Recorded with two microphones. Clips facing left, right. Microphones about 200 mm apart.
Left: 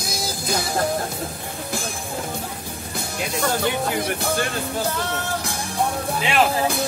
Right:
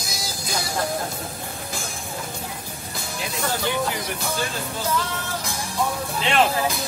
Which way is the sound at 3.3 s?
55° left (ahead or behind).